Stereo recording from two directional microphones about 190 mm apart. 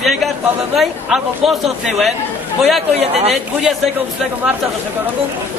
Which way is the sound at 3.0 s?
35° right (ahead or behind).